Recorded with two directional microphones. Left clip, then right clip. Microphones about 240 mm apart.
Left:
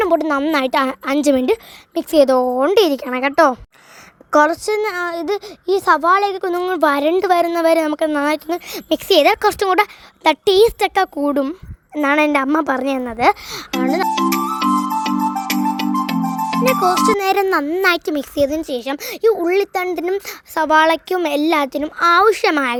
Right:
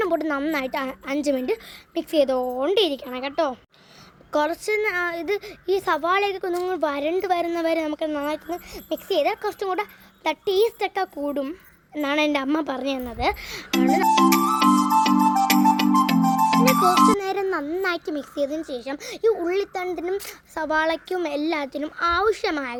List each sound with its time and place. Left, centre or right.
0.0 s a woman's voice: left
14.1 s music: centre
17.1 s a woman's voice: left